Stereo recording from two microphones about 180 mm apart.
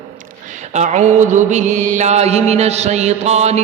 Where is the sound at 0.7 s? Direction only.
40° right (ahead or behind).